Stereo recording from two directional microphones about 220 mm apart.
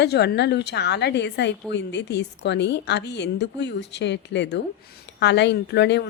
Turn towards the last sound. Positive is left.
turn(degrees=50)  # may be behind; listen again after turning